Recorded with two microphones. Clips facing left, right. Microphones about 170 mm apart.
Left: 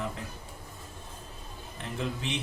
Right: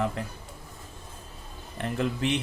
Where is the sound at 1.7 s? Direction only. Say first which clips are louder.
Right 6 dB; 60° right (ahead or behind).